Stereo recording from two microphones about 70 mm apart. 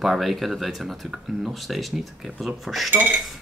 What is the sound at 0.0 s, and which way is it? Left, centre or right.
Speech, centre.